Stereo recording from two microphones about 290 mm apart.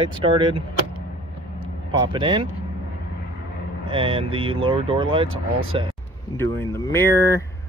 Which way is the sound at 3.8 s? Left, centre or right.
Centre.